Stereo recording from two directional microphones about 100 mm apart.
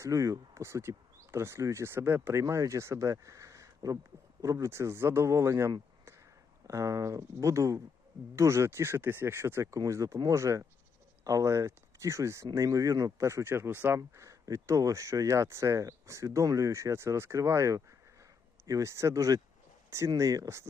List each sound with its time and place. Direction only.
0.0 s speech: 35° right (ahead or behind)